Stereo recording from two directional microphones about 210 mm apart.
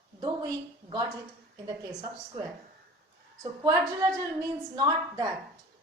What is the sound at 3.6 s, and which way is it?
A woman's voice, 15° right (ahead or behind).